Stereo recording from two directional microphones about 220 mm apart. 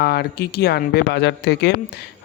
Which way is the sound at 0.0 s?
45° left (ahead or behind).